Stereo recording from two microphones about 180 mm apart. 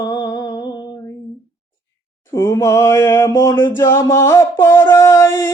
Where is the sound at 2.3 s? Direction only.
15° left (ahead or behind).